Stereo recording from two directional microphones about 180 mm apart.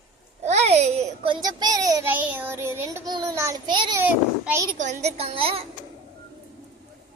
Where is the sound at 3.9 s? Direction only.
10° right (ahead or behind).